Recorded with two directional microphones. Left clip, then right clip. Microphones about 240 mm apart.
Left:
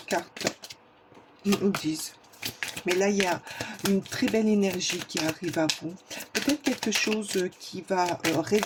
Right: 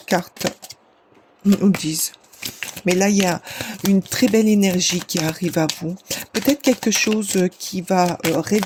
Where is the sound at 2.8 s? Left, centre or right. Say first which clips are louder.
Right 7 dB; right.